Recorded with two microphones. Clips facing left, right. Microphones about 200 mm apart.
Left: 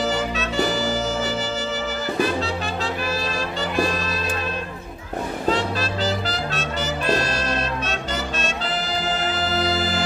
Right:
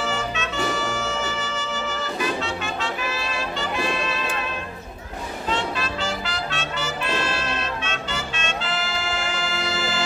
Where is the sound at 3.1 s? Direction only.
40° left (ahead or behind).